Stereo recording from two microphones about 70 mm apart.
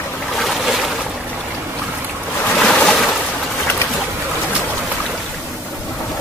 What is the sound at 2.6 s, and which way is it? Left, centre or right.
Boat, centre.